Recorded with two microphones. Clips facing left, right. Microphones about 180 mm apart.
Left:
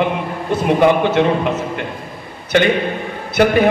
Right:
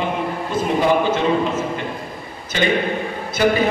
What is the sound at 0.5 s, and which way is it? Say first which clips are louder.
A man's voice: left 4 dB; 65° left (ahead or behind).